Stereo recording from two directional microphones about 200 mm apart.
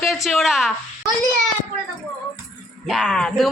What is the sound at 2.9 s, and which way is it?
Speech, centre (ahead or behind).